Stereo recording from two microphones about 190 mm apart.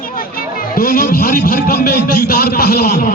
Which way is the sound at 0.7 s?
50° left (ahead or behind).